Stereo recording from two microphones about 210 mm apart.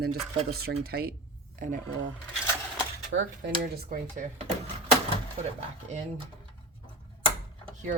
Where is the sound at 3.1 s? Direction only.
65° right (ahead or behind).